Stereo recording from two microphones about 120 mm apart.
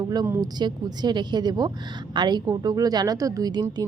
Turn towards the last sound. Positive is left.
turn(degrees=-35)  # may be behind; listen again after turning